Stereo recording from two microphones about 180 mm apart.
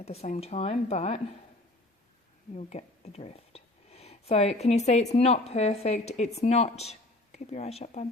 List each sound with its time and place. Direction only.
0.0 s speech: 35° left (ahead or behind)
2.6 s speech: 40° left (ahead or behind)